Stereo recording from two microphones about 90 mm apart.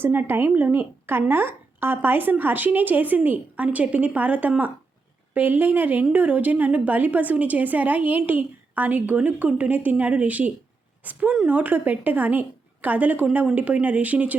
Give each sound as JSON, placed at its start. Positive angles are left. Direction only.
{"t": 0.0, "sound": "a woman's voice", "side_deg": -25}